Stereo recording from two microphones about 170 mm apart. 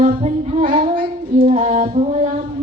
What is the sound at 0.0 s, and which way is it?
Music, 45° right (ahead or behind).